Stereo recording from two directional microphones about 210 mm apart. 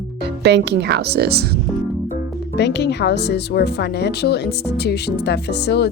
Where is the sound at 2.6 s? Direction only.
55° left (ahead or behind).